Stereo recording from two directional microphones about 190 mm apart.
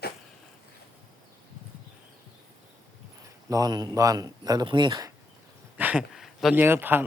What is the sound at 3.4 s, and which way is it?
A man's voice, 20° right (ahead or behind).